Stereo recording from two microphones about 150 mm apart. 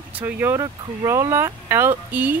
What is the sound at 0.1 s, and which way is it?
Speech, 10° right (ahead or behind).